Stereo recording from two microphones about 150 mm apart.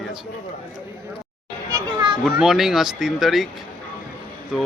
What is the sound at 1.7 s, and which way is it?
Children playing, 25° right (ahead or behind).